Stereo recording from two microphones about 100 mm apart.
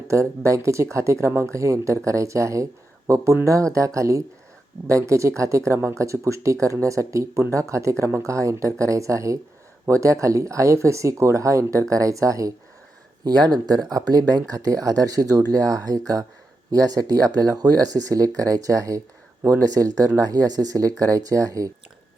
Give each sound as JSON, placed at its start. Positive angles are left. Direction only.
{"t": 0.1, "sound": "speech", "side_deg": -30}